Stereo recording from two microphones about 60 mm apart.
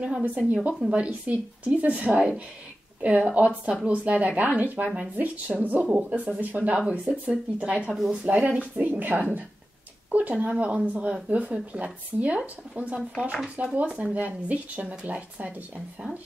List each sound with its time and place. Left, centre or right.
0.0 s speech: right